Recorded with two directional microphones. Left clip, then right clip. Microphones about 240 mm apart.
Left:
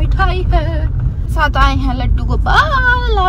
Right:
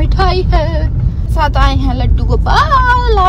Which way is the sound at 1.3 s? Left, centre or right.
Centre.